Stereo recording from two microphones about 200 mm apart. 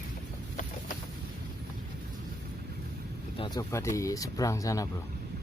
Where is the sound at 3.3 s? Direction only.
25° left (ahead or behind).